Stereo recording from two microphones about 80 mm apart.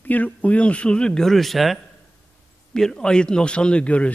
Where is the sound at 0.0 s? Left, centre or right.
Left.